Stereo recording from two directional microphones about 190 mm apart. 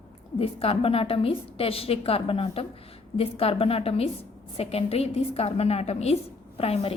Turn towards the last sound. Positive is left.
turn(degrees=30)  # may be behind; listen again after turning